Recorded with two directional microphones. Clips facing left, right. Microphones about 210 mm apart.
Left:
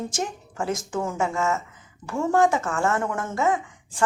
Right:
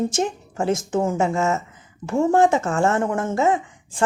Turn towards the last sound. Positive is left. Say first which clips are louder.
# right 3 dB
turn(degrees=-25)  # may be behind; listen again after turning